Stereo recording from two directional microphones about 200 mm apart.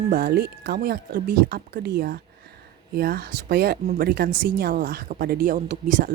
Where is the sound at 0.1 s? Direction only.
50° right (ahead or behind).